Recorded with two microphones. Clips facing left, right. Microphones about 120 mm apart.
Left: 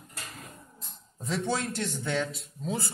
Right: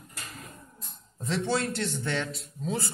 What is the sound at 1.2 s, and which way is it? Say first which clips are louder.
Speech: right 2 dB; 10° left (ahead or behind).